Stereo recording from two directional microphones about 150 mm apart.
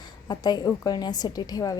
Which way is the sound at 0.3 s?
30° left (ahead or behind).